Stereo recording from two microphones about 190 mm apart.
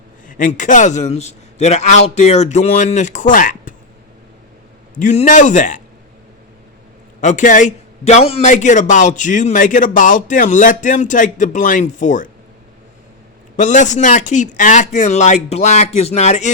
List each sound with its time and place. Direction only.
0.3 s a man's voice: 45° left (ahead or behind)
4.9 s a man's voice: 40° left (ahead or behind)
7.2 s a man's voice: 40° left (ahead or behind)
13.6 s a man's voice: 40° left (ahead or behind)